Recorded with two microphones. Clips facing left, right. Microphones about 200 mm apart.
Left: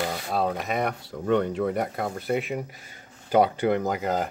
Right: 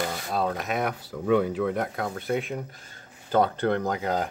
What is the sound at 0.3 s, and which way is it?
Speech, centre (ahead or behind).